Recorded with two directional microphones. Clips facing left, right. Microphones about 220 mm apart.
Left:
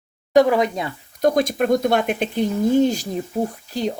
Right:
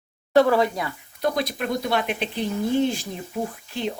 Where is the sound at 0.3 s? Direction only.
15° left (ahead or behind).